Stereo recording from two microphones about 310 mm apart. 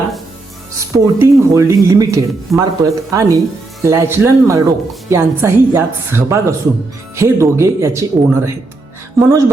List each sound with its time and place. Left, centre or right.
0.9 s a woman's voice: centre